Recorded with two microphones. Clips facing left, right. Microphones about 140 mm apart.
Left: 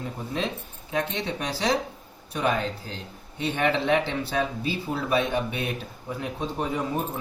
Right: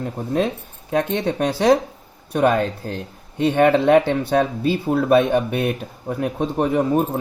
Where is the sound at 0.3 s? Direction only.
50° right (ahead or behind).